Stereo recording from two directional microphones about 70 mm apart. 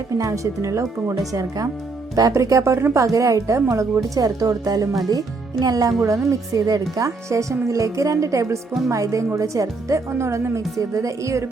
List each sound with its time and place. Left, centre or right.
0.2 s a woman's voice: right
1.3 s a woman's voice: right